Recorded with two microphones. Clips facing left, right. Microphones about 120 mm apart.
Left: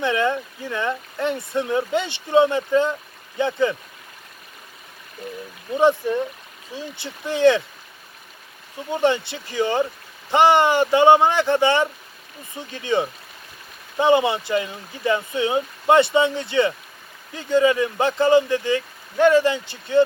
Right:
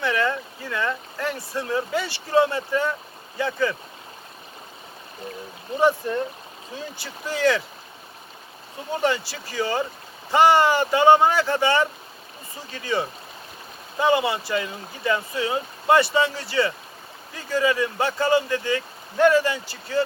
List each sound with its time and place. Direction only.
0.0 s speech: 20° left (ahead or behind)
5.7 s speech: 30° right (ahead or behind)
6.9 s speech: 25° left (ahead or behind)
8.9 s speech: 20° left (ahead or behind)